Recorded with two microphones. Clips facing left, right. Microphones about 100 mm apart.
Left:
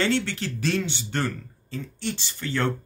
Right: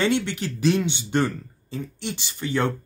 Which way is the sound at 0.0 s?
15° right (ahead or behind).